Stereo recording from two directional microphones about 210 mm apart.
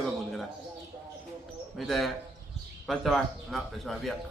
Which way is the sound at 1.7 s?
Centre (ahead or behind).